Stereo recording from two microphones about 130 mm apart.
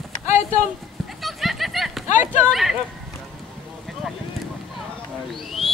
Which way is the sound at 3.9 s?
Centre (ahead or behind).